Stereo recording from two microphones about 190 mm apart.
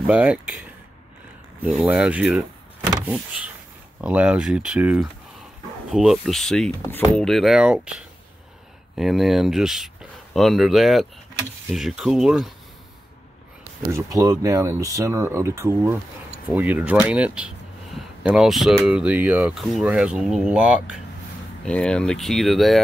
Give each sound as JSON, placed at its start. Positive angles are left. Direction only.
{"t": 0.0, "sound": "speech", "side_deg": -5}
{"t": 1.6, "sound": "speech", "side_deg": -5}
{"t": 2.9, "sound": "power windows", "side_deg": -5}
{"t": 4.0, "sound": "speech", "side_deg": -5}
{"t": 13.9, "sound": "speech", "side_deg": -20}
{"t": 21.6, "sound": "speech", "side_deg": 5}